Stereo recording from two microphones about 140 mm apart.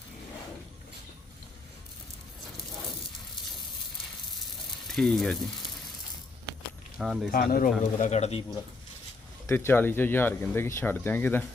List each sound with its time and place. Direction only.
4.9 s frying: 5° left (ahead or behind)
7.0 s frying: 5° right (ahead or behind)
7.3 s speech: 90° left; by 8.4 s 45° left (ahead or behind)
9.5 s speech: 20° left (ahead or behind)